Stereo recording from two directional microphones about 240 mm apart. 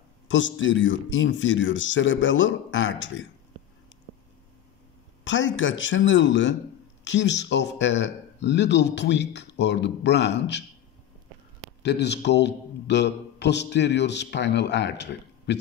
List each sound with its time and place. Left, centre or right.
0.3 s a man's voice: left
5.2 s a man's voice: left
11.8 s a man's voice: left